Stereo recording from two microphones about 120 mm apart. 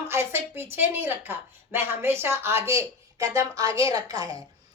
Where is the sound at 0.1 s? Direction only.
20° right (ahead or behind).